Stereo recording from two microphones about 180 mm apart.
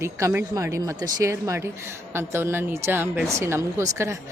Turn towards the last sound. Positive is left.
turn(degrees=-15)  # may be behind; listen again after turning